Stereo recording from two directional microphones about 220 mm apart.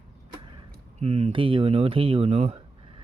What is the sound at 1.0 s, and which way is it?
Speech, 30° right (ahead or behind).